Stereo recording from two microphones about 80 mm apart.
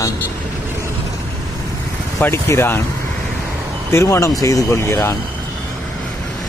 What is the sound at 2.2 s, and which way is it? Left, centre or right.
Speech, left.